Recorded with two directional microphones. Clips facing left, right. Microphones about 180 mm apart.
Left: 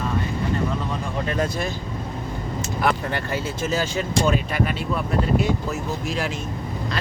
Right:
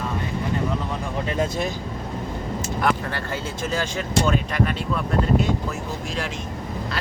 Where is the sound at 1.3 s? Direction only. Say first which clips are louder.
Right 1 dB; 20° right (ahead or behind).